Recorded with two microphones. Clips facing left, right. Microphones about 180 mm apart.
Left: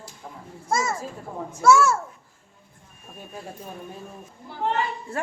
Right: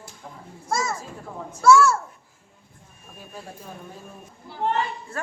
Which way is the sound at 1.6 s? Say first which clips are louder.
Right 1 dB; 20° left (ahead or behind).